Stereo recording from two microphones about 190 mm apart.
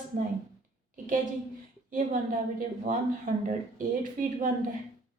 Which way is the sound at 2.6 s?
45° right (ahead or behind).